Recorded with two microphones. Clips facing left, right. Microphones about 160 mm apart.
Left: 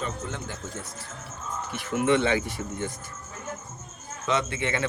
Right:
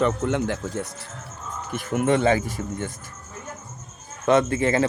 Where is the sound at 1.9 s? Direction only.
45° right (ahead or behind).